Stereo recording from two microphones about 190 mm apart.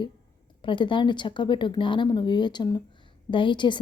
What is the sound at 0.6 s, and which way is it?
A woman's voice, 25° left (ahead or behind).